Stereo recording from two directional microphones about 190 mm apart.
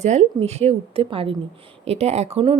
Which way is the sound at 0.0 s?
35° right (ahead or behind).